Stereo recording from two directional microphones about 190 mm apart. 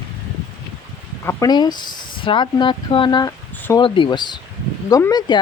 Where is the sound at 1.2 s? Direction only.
20° left (ahead or behind).